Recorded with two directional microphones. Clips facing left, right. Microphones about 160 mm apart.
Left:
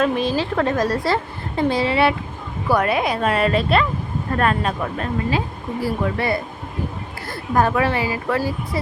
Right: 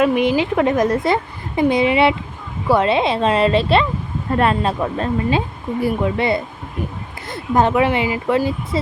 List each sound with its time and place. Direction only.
0.0 s a woman's voice: 20° right (ahead or behind)